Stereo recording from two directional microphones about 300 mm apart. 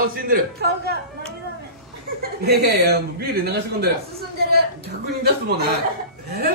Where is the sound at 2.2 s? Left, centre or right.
Right.